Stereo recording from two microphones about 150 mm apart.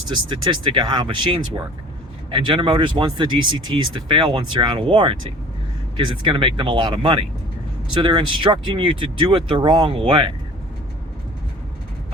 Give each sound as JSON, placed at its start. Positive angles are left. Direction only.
{"t": 0.1, "sound": "speech", "side_deg": -30}